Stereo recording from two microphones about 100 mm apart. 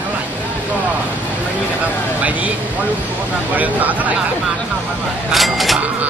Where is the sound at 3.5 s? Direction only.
15° right (ahead or behind).